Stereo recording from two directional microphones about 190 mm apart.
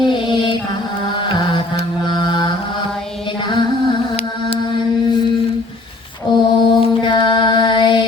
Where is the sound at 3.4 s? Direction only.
25° left (ahead or behind).